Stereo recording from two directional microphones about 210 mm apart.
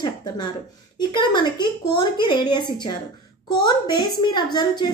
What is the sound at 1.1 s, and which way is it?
A woman's voice, 20° left (ahead or behind).